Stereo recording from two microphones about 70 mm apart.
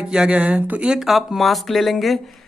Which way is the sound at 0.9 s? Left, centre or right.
Centre.